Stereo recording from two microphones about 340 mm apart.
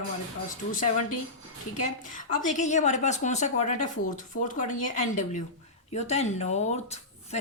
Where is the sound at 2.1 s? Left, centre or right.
Left.